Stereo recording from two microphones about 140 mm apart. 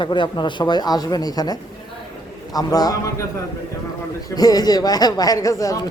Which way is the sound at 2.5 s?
25° left (ahead or behind).